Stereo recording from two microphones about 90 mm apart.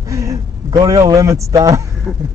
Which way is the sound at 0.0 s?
40° right (ahead or behind).